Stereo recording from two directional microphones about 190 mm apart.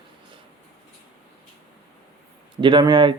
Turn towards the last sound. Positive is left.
turn(degrees=-25)  # may be behind; listen again after turning